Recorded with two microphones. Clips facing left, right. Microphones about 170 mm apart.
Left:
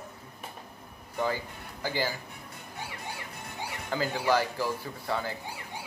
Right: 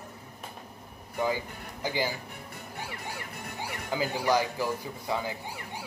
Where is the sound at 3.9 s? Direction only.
10° right (ahead or behind).